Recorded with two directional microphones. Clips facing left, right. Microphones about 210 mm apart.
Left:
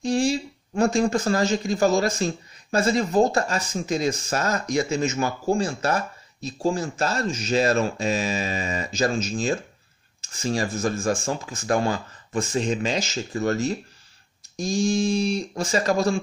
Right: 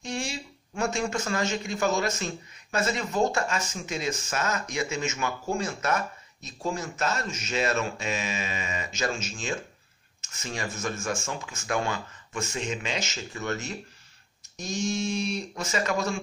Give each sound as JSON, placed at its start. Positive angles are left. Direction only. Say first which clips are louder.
{"t": 0.0, "sound": "speech", "louder": "left 11 dB", "side_deg": 35}